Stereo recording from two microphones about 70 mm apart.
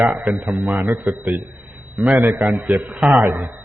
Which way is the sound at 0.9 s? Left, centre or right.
Right.